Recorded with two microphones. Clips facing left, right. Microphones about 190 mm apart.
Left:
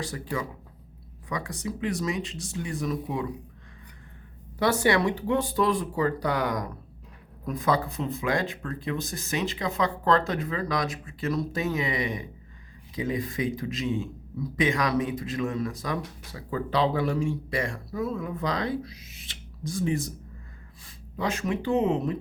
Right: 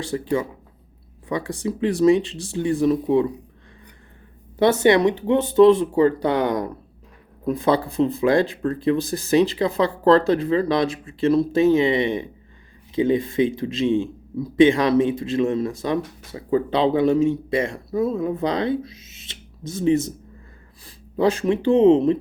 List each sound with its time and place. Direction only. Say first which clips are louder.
0.0 s speech: right 9 dB; 25° right (ahead or behind)
4.5 s speech: right 7 dB; 25° right (ahead or behind)